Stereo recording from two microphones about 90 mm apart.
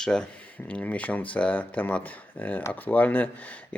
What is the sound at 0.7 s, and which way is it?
Speech, 15° left (ahead or behind).